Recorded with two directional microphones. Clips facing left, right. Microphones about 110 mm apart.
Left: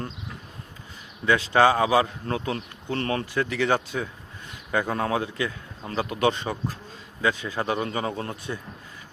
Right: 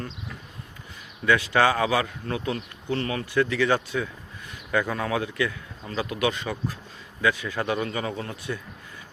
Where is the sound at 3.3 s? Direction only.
20° left (ahead or behind).